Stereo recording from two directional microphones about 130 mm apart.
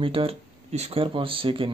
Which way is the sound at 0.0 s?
45° right (ahead or behind).